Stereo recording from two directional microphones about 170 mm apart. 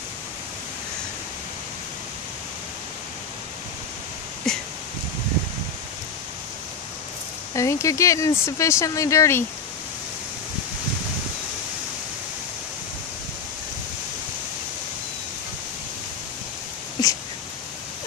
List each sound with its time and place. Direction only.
4.5 s rustling leaves: centre (ahead or behind)
7.5 s speech: 20° left (ahead or behind)
17.0 s a sound: 25° left (ahead or behind)